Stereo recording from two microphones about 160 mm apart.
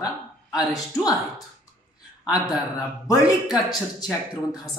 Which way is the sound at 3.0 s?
20° left (ahead or behind).